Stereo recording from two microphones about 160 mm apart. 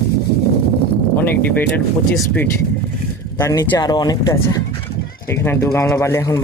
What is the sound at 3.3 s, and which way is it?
Speech, 20° left (ahead or behind).